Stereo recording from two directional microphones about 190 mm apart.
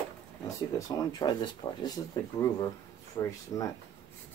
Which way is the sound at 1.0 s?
20° left (ahead or behind).